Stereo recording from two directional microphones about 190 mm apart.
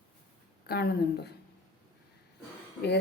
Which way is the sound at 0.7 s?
60° left (ahead or behind).